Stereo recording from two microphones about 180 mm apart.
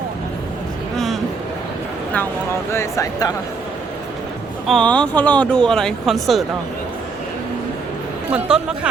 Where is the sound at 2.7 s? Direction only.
15° left (ahead or behind).